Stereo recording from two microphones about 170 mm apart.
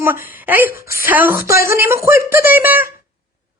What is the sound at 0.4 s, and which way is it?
Speech, 10° right (ahead or behind).